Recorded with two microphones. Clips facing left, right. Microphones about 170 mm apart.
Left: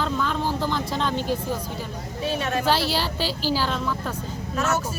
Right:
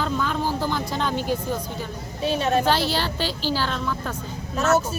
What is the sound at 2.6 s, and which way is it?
Speech, 5° left (ahead or behind).